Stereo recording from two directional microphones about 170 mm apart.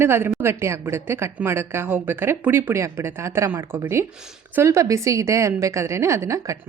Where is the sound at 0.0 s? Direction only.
15° right (ahead or behind).